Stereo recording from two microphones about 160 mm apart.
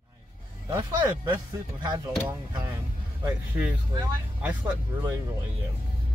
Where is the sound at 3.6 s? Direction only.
10° right (ahead or behind).